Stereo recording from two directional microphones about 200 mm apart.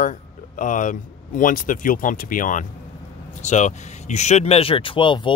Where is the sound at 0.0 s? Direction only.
40° left (ahead or behind).